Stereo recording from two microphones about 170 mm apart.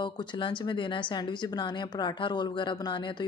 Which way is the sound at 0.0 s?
30° left (ahead or behind).